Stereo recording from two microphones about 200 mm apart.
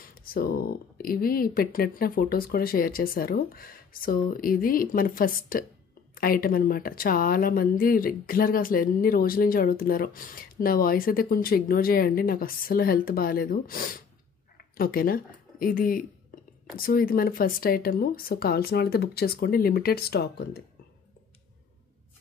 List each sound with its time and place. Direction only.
0.0 s speech: 45° left (ahead or behind)